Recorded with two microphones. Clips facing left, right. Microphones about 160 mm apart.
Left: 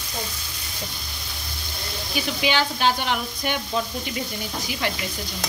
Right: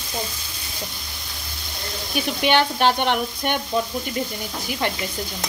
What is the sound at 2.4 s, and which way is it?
Speech, 60° right (ahead or behind).